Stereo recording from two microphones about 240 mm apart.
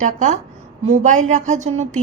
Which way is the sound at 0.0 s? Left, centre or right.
Right.